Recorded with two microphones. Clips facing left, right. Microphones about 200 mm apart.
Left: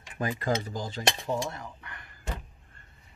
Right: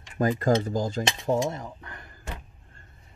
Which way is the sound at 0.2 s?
45° right (ahead or behind).